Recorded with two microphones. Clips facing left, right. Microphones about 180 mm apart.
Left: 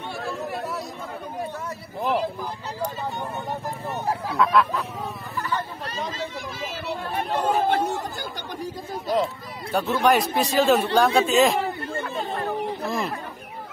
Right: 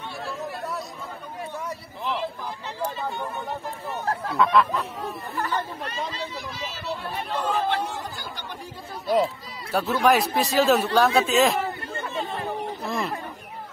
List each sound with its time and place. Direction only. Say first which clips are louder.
2.0 s a sound: left 6 dB; 45° left (ahead or behind)
4.0 s honk: even; 10° left (ahead or behind)
4.4 s a man's voice: even; centre (ahead or behind)
7.2 s speech: left 4 dB; 50° left (ahead or behind)
9.1 s a man's voice: right 2 dB; 5° right (ahead or behind)
12.8 s a sound: right 1 dB; centre (ahead or behind)